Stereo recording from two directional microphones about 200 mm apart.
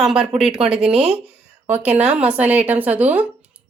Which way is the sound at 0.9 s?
30° right (ahead or behind).